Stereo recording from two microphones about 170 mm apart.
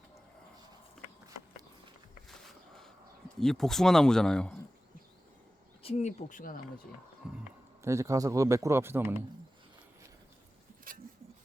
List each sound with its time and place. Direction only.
2.3 s a sound: centre (ahead or behind)
3.4 s speech: centre (ahead or behind)
5.8 s speech: 40° left (ahead or behind)
7.2 s speech: 5° right (ahead or behind)
7.8 s speech: 15° right (ahead or behind)
10.9 s a sound: 55° right (ahead or behind)